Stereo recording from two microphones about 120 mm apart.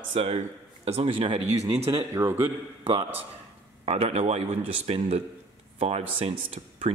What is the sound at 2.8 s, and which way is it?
A man's voice, 50° right (ahead or behind).